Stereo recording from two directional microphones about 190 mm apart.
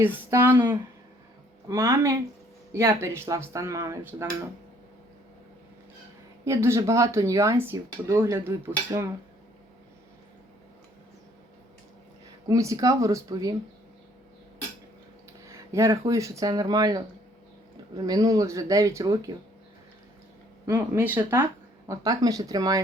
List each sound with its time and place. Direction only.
0.0 s speech: 10° right (ahead or behind)
6.4 s speech: 15° right (ahead or behind)
12.5 s speech: 15° right (ahead or behind)
15.4 s speech: 15° right (ahead or behind)
20.7 s speech: 10° right (ahead or behind)